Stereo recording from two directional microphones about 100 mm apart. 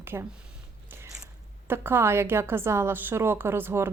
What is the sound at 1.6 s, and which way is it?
A woman's voice, 20° right (ahead or behind).